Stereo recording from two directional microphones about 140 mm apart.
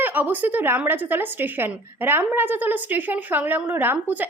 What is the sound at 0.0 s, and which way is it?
A woman's voice, 15° right (ahead or behind).